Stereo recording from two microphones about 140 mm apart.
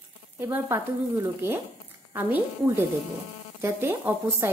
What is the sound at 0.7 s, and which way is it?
A woman's voice, 15° right (ahead or behind).